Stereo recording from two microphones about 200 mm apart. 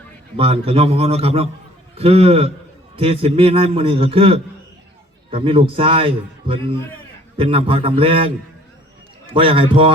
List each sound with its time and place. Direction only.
0.3 s a man's voice: 30° right (ahead or behind)
9.3 s a man's voice: 25° right (ahead or behind)